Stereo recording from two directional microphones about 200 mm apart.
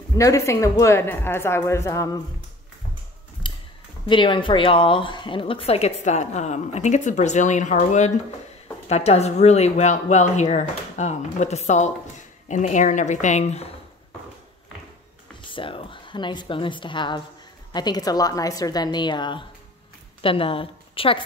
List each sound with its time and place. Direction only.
0.1 s a woman's voice: 15° left (ahead or behind)
4.1 s speech: 25° left (ahead or behind)
15.5 s a woman's voice: 25° left (ahead or behind)